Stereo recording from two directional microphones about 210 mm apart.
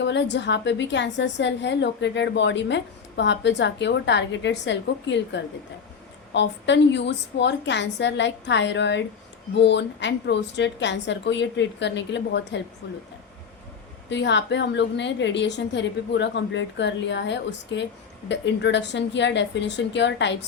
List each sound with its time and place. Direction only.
0.0 s a woman's voice: 55° left (ahead or behind)
14.1 s a woman's voice: 55° left (ahead or behind)